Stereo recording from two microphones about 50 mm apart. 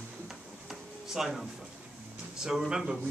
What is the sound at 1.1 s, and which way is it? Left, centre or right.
Speech, centre.